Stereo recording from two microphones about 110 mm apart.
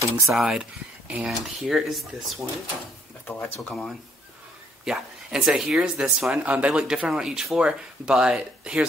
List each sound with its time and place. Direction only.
0.3 s speech: 5° right (ahead or behind)
3.3 s speech: 20° left (ahead or behind)
3.6 s speech: 5° left (ahead or behind)